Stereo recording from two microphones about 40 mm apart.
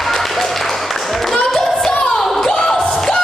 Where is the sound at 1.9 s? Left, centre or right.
Left.